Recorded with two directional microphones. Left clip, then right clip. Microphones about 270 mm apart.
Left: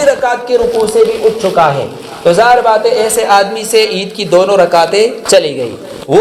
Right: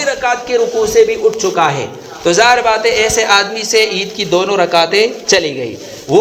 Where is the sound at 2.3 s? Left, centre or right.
Right.